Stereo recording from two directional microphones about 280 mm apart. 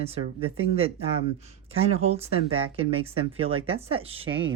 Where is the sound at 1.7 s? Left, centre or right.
Right.